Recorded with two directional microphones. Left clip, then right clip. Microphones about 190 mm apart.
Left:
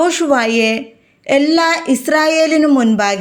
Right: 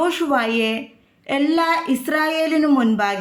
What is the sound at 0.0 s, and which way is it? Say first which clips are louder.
A woman's voice: left 6 dB; 25° left (ahead or behind).